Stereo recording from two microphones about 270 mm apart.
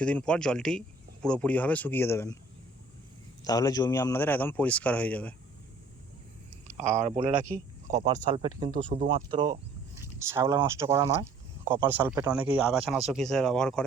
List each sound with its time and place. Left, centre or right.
0.0 s speech: centre
3.4 s a man's voice: centre
6.7 s speech: right
8.9 s speech: right
10.0 s speech: centre